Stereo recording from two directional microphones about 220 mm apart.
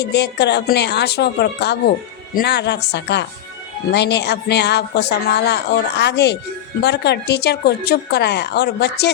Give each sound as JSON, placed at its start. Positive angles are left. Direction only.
{"t": 0.0, "sound": "speech", "side_deg": 50}